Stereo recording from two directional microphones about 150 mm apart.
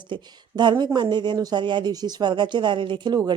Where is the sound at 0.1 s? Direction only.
30° right (ahead or behind).